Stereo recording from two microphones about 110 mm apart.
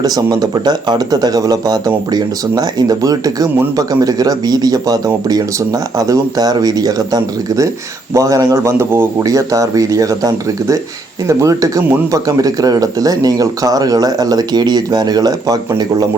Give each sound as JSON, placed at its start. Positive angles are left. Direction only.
{"t": 0.0, "sound": "speech", "side_deg": -35}